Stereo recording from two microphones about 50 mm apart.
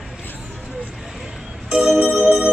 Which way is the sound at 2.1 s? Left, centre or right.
Centre.